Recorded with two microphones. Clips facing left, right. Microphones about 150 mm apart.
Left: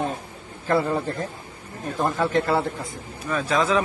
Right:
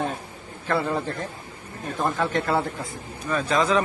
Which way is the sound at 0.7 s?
5° left (ahead or behind).